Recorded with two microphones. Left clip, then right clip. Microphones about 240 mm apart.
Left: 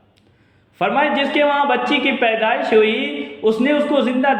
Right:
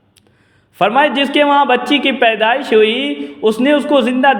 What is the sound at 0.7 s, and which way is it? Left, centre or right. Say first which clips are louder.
A man's voice: right 5 dB; right.